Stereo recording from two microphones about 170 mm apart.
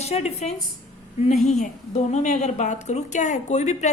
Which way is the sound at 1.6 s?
45° left (ahead or behind).